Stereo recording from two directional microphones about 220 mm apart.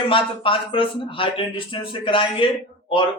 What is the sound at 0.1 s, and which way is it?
A man's voice, 25° left (ahead or behind).